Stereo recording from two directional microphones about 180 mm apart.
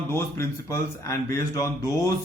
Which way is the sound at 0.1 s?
15° left (ahead or behind).